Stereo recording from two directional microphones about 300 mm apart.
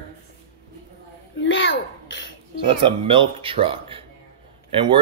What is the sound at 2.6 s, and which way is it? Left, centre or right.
A man's voice, centre.